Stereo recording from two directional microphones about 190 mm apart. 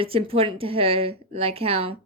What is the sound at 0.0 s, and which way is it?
A woman's voice, 30° right (ahead or behind).